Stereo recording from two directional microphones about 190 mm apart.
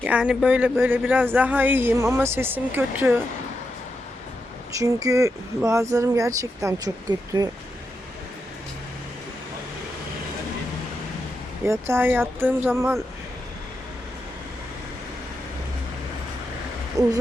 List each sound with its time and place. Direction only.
0.0 s speech: 5° right (ahead or behind)
4.7 s speech: 15° right (ahead or behind)
11.6 s speech: 15° right (ahead or behind)
17.0 s hoot: 15° right (ahead or behind)